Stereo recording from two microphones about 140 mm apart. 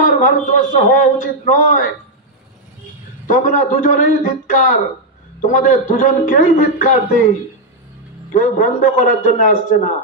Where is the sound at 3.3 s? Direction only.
70° left (ahead or behind).